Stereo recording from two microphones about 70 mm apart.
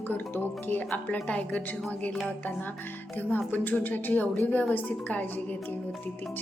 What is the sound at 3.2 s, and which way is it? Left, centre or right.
Speech, left.